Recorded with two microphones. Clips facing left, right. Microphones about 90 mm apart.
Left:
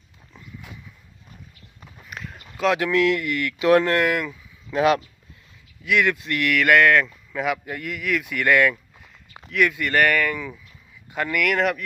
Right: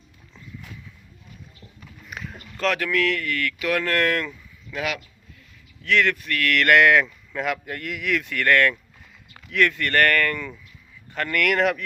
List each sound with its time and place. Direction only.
0.3 s horse: 15° left (ahead or behind)
2.0 s a sound: centre (ahead or behind)
2.6 s speech: 15° left (ahead or behind)
4.0 s speech: 10° left (ahead or behind)
4.7 s speech: 35° left (ahead or behind)
5.8 s speech: 10° left (ahead or behind)
6.5 s speech: 5° left (ahead or behind)